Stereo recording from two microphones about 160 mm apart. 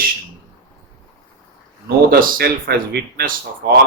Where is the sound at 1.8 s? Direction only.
65° right (ahead or behind).